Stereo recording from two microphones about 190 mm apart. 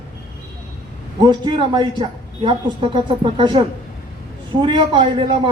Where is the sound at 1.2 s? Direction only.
25° right (ahead or behind).